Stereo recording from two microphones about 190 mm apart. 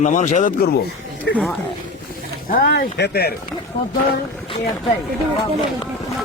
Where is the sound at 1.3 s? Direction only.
75° left (ahead or behind).